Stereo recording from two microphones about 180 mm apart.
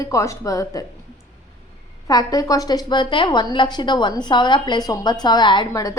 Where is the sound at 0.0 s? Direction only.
15° left (ahead or behind).